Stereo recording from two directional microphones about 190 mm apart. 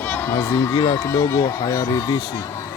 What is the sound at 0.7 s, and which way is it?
Speech, 20° left (ahead or behind).